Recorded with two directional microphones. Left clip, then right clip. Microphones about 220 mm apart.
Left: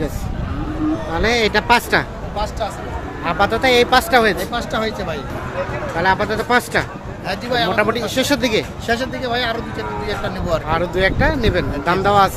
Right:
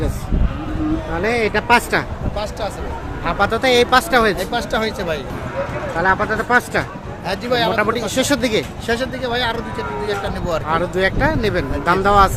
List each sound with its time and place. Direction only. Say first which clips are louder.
1.2 s speech: left 2 dB; 5° left (ahead or behind)
3.2 s speech: left 1 dB; centre (ahead or behind)
4.4 s speech: right 1 dB; 45° right (ahead or behind)
6.0 s speech: even; 5° left (ahead or behind)
7.3 s a man's voice: right 1 dB; 30° right (ahead or behind)
7.8 s speech: left 1 dB; centre (ahead or behind)
8.9 s speech: even; 15° right (ahead or behind)
10.7 s speech: even; centre (ahead or behind)